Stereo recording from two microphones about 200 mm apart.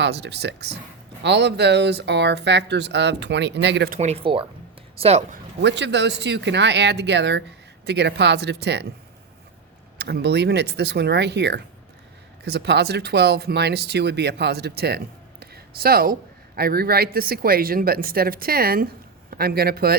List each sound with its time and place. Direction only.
0.0 s speech: 55° right (ahead or behind)
3.9 s speech: 30° right (ahead or behind)
5.6 s speech: 60° right (ahead or behind)
10.0 s speech: 55° right (ahead or behind)